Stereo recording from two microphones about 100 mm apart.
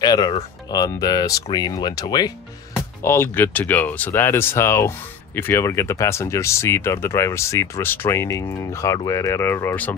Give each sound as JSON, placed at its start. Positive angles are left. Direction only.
{"t": 0.0, "sound": "speech", "side_deg": 45}
{"t": 3.0, "sound": "speech", "side_deg": 25}